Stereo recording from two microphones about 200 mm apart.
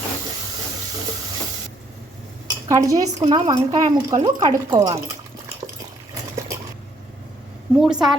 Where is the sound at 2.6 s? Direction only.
15° right (ahead or behind).